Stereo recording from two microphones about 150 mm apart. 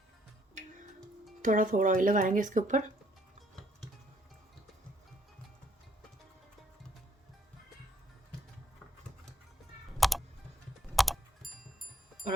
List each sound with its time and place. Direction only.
1.4 s speech: 65° right (ahead or behind)
10.0 s music: centre (ahead or behind)
10.9 s clock: centre (ahead or behind)